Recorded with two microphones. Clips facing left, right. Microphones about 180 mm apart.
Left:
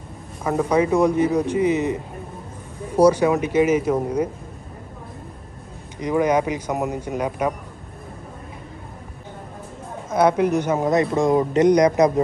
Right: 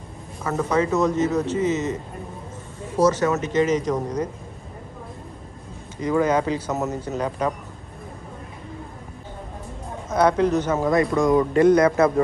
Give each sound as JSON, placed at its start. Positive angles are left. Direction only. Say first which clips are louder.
{"t": 0.4, "sound": "speech", "louder": "left 3 dB", "side_deg": 15}
{"t": 3.0, "sound": "speech", "louder": "left 4 dB", "side_deg": 10}
{"t": 5.9, "sound": "speech", "louder": "left 1 dB", "side_deg": 15}
{"t": 10.0, "sound": "speech", "louder": "left 1 dB", "side_deg": 10}